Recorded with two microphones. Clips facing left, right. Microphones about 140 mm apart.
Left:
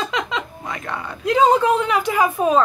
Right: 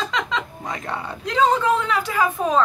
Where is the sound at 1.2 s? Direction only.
10° left (ahead or behind).